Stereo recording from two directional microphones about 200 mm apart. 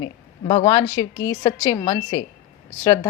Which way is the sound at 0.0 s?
25° left (ahead or behind).